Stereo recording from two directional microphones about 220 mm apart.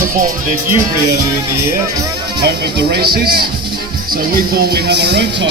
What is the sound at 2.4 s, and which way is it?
Music, 50° right (ahead or behind).